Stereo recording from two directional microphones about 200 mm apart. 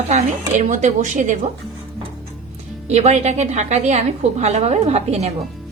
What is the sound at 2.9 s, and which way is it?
A woman's voice, 35° right (ahead or behind).